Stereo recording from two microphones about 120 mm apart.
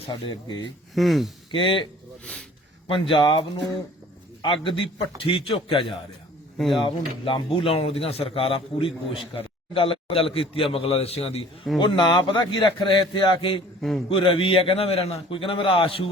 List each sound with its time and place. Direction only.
0.1 s a man's voice: 40° left (ahead or behind)
0.9 s speech: centre (ahead or behind)
1.5 s a man's voice: 45° left (ahead or behind)
11.8 s a man's voice: 40° left (ahead or behind)